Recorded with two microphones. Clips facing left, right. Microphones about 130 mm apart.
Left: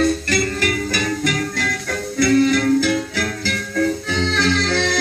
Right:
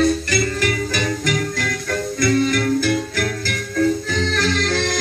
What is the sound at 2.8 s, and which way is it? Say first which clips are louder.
Music: left 1 dB; 70° left (ahead or behind).